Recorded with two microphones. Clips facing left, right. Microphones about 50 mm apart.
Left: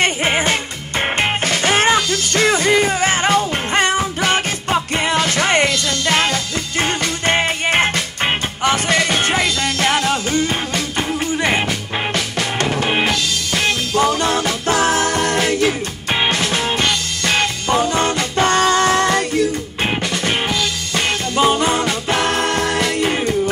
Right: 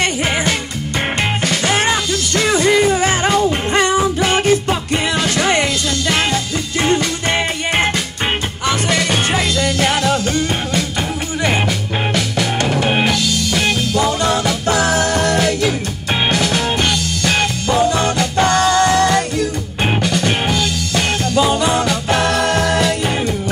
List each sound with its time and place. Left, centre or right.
0.0 s music: left